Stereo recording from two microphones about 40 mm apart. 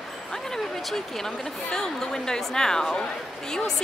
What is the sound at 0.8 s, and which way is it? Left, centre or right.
Speech, centre.